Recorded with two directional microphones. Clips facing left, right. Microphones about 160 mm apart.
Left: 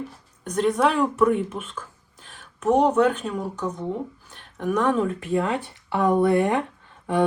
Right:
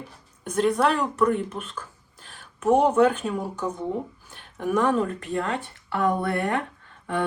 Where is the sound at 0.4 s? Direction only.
Centre (ahead or behind).